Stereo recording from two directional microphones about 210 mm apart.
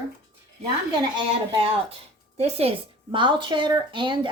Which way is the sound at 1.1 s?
20° right (ahead or behind).